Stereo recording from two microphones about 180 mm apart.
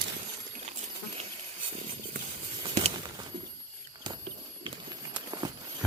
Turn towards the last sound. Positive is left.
turn(degrees=-25)  # may be behind; listen again after turning